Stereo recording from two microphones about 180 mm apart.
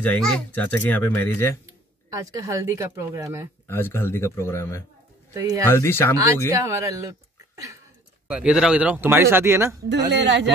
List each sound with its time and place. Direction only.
0.0 s speech: 10° left (ahead or behind)
2.1 s speech: 20° right (ahead or behind)
3.6 s speech: 10° left (ahead or behind)
6.5 s speech: 15° right (ahead or behind)
8.3 s speech: 5° right (ahead or behind)
9.8 s speech: 75° right (ahead or behind)